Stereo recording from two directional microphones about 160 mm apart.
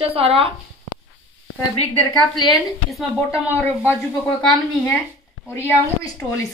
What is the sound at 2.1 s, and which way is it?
Speech, 25° left (ahead or behind).